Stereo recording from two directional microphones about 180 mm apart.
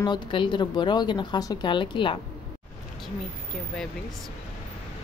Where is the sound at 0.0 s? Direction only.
25° left (ahead or behind).